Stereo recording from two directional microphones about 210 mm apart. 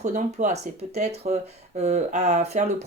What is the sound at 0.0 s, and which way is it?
Speech, 35° right (ahead or behind).